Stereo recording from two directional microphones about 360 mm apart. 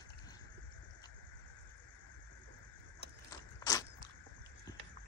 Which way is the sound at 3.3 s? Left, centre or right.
Centre.